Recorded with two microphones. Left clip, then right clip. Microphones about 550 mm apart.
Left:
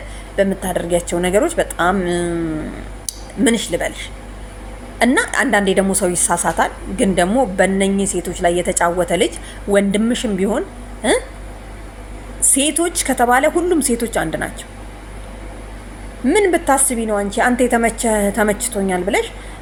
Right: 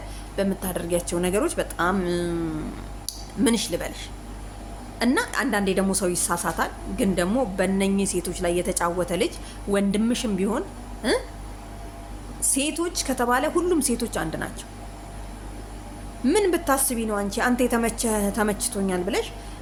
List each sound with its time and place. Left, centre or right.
0.3 s a woman's voice: right
13.1 s a woman's voice: right
16.2 s a woman's voice: right